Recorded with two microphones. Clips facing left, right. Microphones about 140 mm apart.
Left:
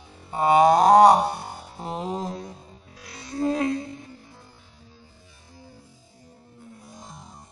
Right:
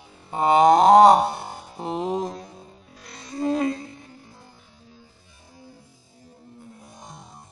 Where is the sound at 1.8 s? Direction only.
20° right (ahead or behind).